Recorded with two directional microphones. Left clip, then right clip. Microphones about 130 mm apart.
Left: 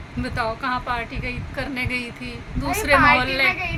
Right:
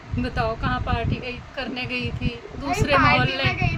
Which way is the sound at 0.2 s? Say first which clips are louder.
Even; 15° right (ahead or behind).